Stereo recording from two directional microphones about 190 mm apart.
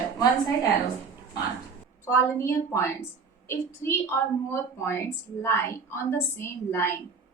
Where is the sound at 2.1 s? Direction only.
15° left (ahead or behind).